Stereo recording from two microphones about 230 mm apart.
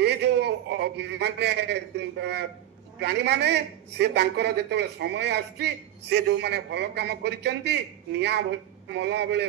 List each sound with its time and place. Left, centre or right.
0.0 s a man's voice: right